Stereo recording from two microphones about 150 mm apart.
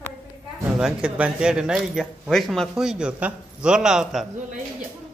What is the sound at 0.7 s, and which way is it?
Speech, 5° right (ahead or behind).